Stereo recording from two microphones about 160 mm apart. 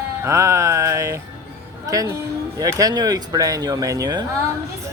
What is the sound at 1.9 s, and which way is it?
Speech, 20° right (ahead or behind).